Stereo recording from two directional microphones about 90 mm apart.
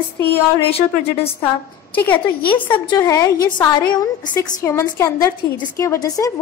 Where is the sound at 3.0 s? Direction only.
40° left (ahead or behind).